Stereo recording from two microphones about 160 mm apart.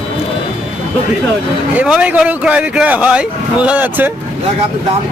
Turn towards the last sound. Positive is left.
turn(degrees=-10)  # may be behind; listen again after turning